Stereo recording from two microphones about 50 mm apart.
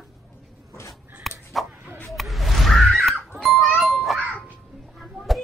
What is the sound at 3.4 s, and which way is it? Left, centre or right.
Music, centre.